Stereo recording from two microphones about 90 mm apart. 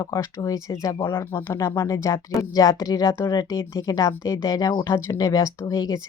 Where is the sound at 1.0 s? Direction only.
25° left (ahead or behind).